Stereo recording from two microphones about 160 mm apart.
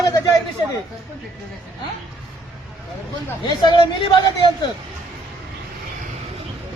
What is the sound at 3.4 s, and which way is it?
Speech, 30° left (ahead or behind).